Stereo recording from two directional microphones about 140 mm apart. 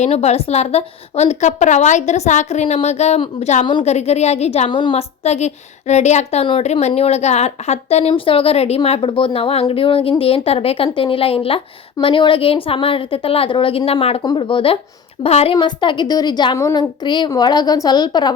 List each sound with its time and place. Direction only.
0.0 s a woman's voice: 50° left (ahead or behind)
4.7 s a woman's voice: 35° left (ahead or behind)
4.9 s a woman's voice: 50° left (ahead or behind)
14.2 s a woman's voice: 30° left (ahead or behind)
15.5 s a woman's voice: 35° left (ahead or behind)
16.6 s a woman's voice: 20° left (ahead or behind)
17.0 s a woman's voice: 35° left (ahead or behind)